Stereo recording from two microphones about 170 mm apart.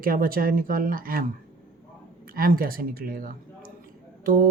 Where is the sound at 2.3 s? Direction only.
60° right (ahead or behind).